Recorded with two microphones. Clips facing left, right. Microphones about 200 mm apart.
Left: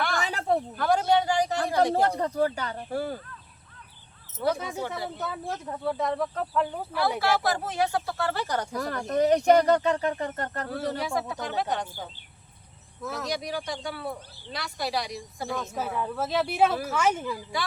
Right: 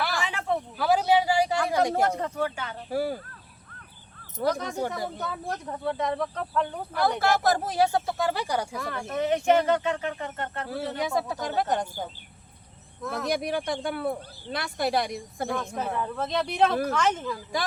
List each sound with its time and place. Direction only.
0.2 s a sound: 40° left (ahead or behind)
0.8 s a sound: 5° right (ahead or behind)
1.8 s speech: 35° left (ahead or behind)
2.9 s speech: 10° right (ahead or behind)
4.4 s speech: 5° left (ahead or behind)
7.2 s speech: 45° right (ahead or behind); by 8.7 s 10° right (ahead or behind)
8.7 s speech: 40° left (ahead or behind)
10.9 s speech: 20° right (ahead or behind)
11.3 s speech: 45° right (ahead or behind)
13.0 s speech: centre (ahead or behind)
13.2 s speech: 55° right (ahead or behind)
15.4 s speech: centre (ahead or behind)